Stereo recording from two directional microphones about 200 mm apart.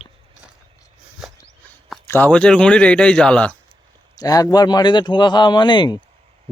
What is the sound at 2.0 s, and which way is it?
Speech, 10° left (ahead or behind).